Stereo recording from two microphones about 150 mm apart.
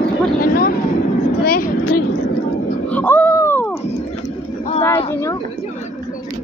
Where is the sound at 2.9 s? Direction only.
10° left (ahead or behind).